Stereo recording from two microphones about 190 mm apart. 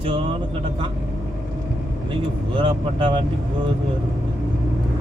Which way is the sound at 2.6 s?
30° right (ahead or behind).